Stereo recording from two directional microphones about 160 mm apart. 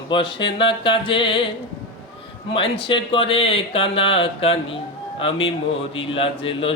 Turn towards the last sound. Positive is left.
turn(degrees=35)  # may be behind; listen again after turning